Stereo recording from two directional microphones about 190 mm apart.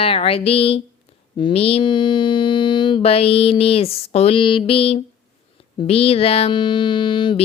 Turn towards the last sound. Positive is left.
turn(degrees=25)  # may be behind; listen again after turning